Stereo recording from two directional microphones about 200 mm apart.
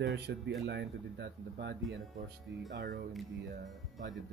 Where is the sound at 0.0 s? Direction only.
60° right (ahead or behind).